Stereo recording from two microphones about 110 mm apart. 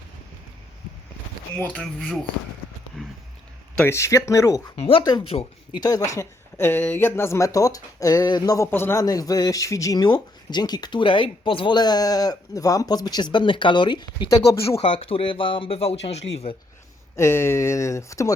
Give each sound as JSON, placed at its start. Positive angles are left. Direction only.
{"t": 1.5, "sound": "speech", "side_deg": 10}
{"t": 3.0, "sound": "a sound", "side_deg": 5}
{"t": 3.8, "sound": "speech", "side_deg": 25}
{"t": 4.8, "sound": "speech", "side_deg": 55}
{"t": 5.4, "sound": "speech", "side_deg": 45}
{"t": 14.8, "sound": "speech", "side_deg": 55}
{"t": 17.2, "sound": "speech", "side_deg": 25}